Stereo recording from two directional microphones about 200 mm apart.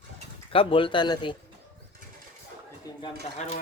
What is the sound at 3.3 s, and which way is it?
Speech, 35° left (ahead or behind).